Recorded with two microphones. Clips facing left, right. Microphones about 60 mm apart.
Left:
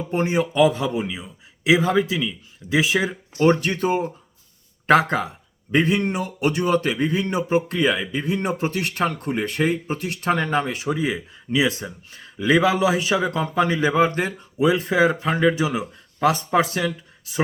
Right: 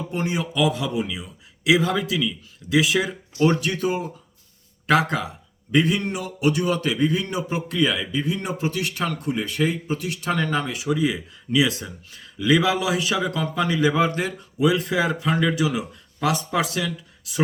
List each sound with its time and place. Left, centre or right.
0.1 s speech: left